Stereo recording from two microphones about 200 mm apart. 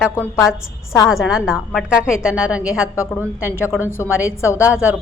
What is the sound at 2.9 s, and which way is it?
A woman's voice, 15° left (ahead or behind).